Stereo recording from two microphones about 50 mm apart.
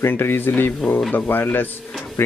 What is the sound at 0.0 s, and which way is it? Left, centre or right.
Speech, left.